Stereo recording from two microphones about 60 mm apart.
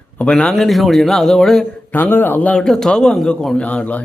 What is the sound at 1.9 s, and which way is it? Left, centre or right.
Speech, left.